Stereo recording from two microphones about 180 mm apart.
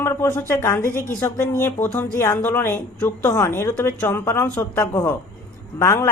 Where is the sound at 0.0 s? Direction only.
15° left (ahead or behind).